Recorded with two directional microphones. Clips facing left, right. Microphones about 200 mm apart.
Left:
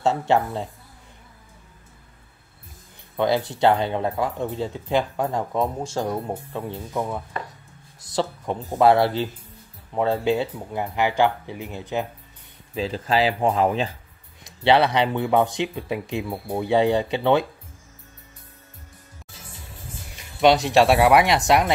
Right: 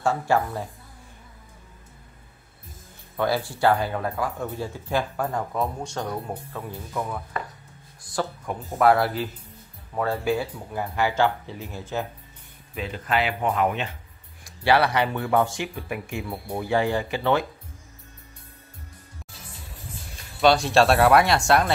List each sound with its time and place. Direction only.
0.0 s speech: 20° left (ahead or behind)
3.2 s speech: 20° left (ahead or behind)
12.7 s speech: 30° left (ahead or behind)
20.2 s speech: 20° left (ahead or behind)